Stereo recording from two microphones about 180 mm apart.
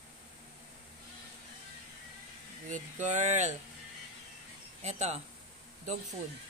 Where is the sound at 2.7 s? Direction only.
40° right (ahead or behind).